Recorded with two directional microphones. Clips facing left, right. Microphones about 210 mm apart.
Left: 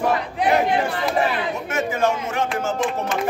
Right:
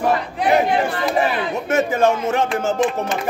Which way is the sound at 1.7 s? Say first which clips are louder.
Right 5 dB; 25° right (ahead or behind).